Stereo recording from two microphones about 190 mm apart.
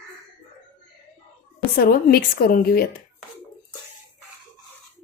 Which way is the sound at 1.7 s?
55° left (ahead or behind).